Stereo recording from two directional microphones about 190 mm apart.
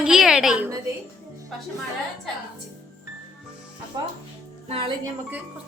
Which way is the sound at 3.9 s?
25° right (ahead or behind).